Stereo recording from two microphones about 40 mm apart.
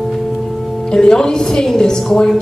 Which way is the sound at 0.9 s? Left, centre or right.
Centre.